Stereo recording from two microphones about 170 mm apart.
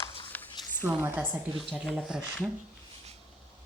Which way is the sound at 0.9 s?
10° right (ahead or behind).